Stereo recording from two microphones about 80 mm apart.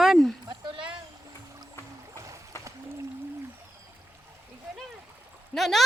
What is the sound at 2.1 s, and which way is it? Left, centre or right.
Boat, right.